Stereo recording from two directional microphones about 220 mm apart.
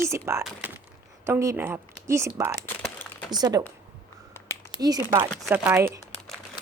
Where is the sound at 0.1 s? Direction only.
10° right (ahead or behind).